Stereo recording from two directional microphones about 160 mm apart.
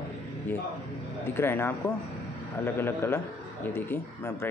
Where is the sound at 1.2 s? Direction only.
15° left (ahead or behind).